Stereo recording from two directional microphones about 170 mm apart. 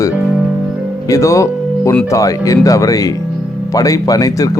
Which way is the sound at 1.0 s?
20° left (ahead or behind).